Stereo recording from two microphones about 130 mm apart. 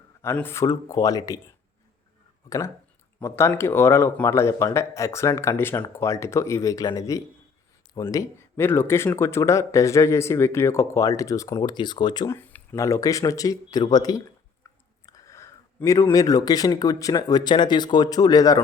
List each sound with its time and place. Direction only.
0.3 s speech: 20° left (ahead or behind)
3.2 s speech: 20° left (ahead or behind)
12.3 s speech: 15° left (ahead or behind)